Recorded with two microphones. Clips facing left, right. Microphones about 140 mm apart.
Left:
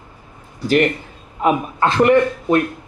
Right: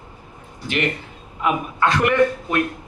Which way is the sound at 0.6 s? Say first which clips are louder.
Left 8 dB; 40° left (ahead or behind).